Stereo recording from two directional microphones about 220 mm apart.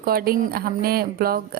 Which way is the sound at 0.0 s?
45° right (ahead or behind).